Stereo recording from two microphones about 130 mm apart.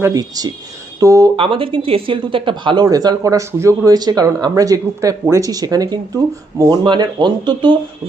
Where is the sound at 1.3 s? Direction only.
45° right (ahead or behind).